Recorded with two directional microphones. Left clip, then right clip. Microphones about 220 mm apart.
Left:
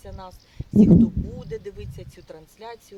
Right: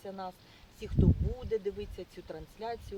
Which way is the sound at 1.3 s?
20° left (ahead or behind).